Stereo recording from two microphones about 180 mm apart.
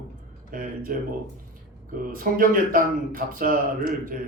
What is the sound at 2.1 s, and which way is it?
Speech, 50° right (ahead or behind).